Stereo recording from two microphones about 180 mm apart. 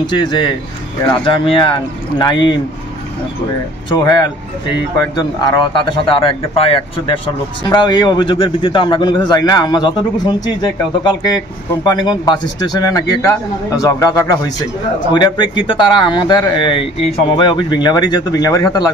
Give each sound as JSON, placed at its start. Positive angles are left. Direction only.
{"t": 0.2, "sound": "a man's voice", "side_deg": 25}
{"t": 3.9, "sound": "a man's voice", "side_deg": 25}